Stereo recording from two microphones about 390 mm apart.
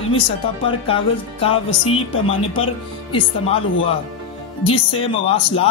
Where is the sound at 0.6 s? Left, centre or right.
Centre.